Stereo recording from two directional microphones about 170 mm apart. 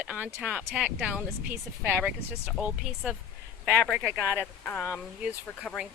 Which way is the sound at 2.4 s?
5° right (ahead or behind).